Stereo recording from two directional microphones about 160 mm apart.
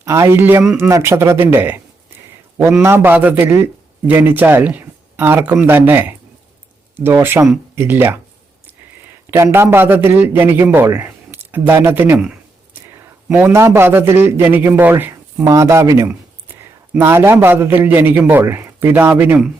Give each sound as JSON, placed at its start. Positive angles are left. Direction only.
{"t": 0.0, "sound": "a man's voice", "side_deg": -20}
{"t": 2.8, "sound": "a man's voice", "side_deg": -15}
{"t": 9.3, "sound": "a man's voice", "side_deg": -15}